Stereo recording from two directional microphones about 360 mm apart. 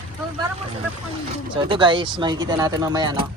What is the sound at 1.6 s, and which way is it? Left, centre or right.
Speech, centre.